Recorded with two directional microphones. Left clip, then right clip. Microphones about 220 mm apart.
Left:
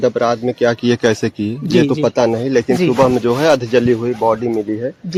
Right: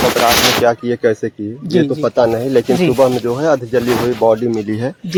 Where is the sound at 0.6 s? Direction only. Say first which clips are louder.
Right 1 dB; 60° left (ahead or behind).